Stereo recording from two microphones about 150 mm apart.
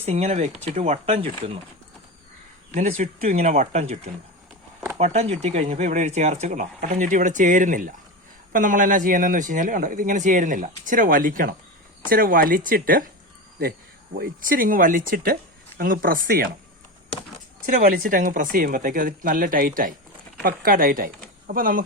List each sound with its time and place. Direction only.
0.0 s speech: 45° right (ahead or behind)
2.7 s speech: 55° right (ahead or behind)
4.9 s speech: 45° right (ahead or behind); by 13.1 s 70° right (ahead or behind)
13.6 s speech: 90° right
17.7 s speech: 65° right (ahead or behind)